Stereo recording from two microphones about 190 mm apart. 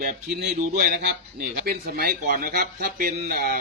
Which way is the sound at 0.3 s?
50° right (ahead or behind).